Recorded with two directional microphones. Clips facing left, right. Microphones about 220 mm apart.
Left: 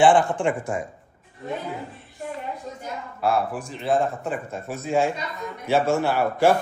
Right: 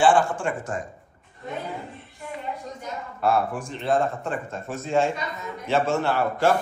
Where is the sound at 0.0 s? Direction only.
15° left (ahead or behind).